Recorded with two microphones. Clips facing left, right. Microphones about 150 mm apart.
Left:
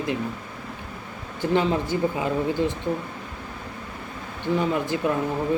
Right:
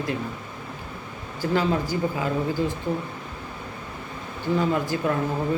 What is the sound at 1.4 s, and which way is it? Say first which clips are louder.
Speech: left 1 dB; 20° left (ahead or behind).